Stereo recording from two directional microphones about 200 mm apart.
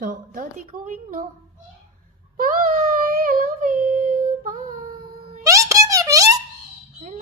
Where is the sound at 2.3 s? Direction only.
45° right (ahead or behind).